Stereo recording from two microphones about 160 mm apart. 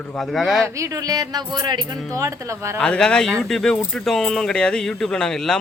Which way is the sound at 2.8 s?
5° left (ahead or behind).